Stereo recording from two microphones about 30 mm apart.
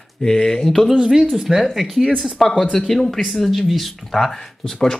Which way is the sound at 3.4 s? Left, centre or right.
Centre.